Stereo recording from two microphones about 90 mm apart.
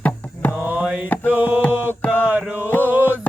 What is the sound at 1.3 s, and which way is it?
Music, 20° right (ahead or behind).